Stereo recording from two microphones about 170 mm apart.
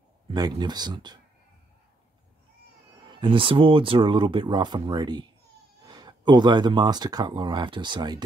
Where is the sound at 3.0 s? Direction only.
30° right (ahead or behind).